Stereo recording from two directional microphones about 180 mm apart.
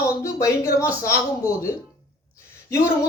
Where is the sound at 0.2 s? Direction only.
15° left (ahead or behind).